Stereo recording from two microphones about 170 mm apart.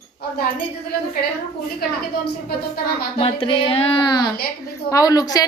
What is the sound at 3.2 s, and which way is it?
A woman's voice, 30° left (ahead or behind).